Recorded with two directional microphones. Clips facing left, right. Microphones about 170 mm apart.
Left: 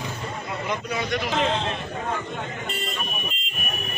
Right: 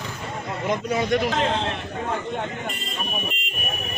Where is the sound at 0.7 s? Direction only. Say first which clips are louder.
Right 6 dB; 45° right (ahead or behind).